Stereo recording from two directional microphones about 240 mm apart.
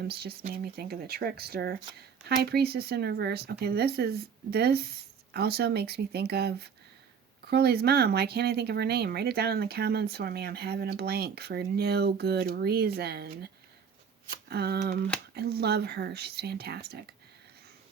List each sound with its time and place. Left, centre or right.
0.0 s speech: right